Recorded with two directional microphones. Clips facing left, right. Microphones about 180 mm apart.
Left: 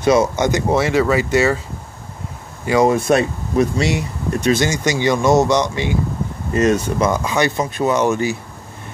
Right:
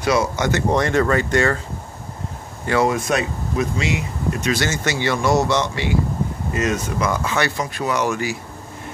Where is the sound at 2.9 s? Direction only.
30° left (ahead or behind).